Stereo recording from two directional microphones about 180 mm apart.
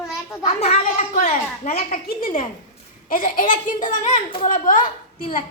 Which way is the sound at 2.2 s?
50° left (ahead or behind).